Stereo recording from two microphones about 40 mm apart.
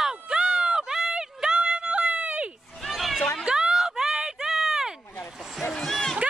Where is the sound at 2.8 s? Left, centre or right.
Centre.